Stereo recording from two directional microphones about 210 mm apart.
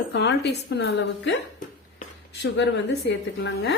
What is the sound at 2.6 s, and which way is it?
A woman's voice, 55° left (ahead or behind).